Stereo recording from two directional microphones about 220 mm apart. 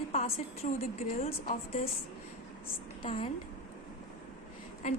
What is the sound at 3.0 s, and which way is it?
Speech, 25° left (ahead or behind).